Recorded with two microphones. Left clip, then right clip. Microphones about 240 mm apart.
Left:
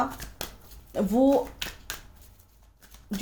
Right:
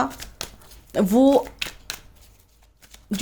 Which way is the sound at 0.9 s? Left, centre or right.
Right.